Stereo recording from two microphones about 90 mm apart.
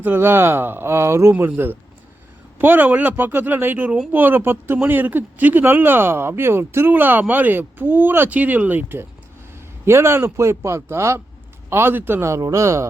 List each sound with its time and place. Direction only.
0.0 s a man's voice: 25° right (ahead or behind)